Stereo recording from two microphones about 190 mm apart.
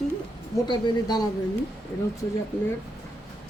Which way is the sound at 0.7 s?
25° left (ahead or behind).